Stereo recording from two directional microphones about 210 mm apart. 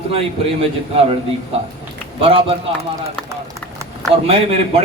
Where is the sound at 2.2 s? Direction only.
25° right (ahead or behind).